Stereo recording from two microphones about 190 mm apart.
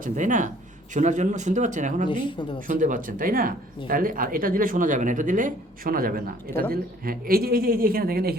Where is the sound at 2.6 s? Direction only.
45° right (ahead or behind).